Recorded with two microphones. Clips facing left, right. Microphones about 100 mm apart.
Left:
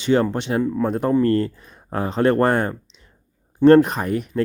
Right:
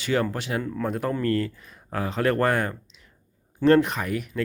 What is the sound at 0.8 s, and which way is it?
Speech, 30° left (ahead or behind).